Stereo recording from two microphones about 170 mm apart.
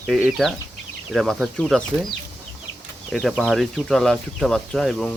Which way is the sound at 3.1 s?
Centre (ahead or behind).